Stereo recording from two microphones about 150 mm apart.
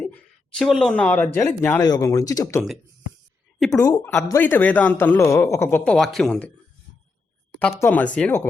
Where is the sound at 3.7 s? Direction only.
20° left (ahead or behind); by 6.5 s 5° left (ahead or behind).